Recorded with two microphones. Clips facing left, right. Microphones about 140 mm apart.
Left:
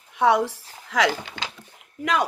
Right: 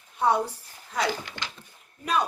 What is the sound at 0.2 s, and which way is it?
A woman's voice, 90° left.